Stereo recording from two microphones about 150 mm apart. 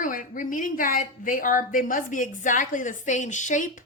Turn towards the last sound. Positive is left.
turn(degrees=55)  # may be behind; listen again after turning